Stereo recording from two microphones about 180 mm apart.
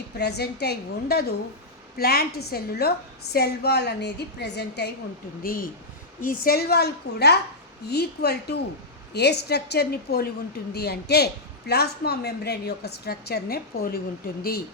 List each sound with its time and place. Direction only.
0.2 s a woman's voice: 65° left (ahead or behind)
5.4 s a woman's voice: 50° left (ahead or behind)